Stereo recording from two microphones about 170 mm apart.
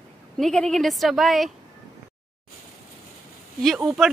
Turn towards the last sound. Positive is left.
turn(degrees=0)  # may be behind; listen again after turning